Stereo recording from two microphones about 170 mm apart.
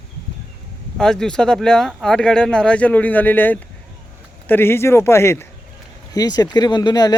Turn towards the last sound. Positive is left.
turn(degrees=20)  # may be behind; listen again after turning